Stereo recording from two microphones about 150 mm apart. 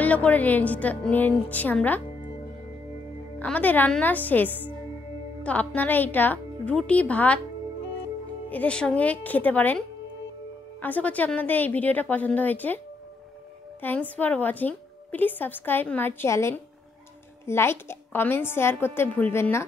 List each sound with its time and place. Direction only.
0.0 s a woman's voice: 10° left (ahead or behind)
3.3 s a woman's voice: 10° left (ahead or behind)
8.5 s a woman's voice: 10° left (ahead or behind)